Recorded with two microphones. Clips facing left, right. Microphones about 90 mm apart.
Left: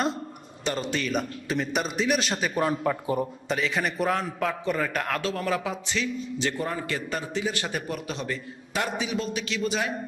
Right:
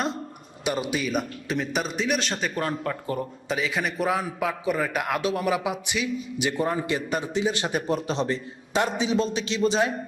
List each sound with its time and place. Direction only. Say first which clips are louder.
0.6 s a man's voice: right 2 dB; 10° right (ahead or behind); by 3.2 s 10° left (ahead or behind)
3.5 s a man's voice: right 1 dB; centre (ahead or behind); by 9.9 s 30° right (ahead or behind)